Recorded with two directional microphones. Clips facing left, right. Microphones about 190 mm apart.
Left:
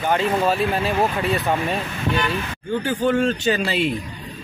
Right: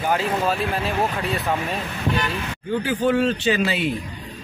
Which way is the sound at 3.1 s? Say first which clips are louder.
Even; 45° left (ahead or behind).